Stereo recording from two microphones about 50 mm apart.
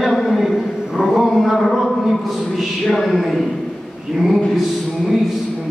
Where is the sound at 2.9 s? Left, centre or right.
Centre.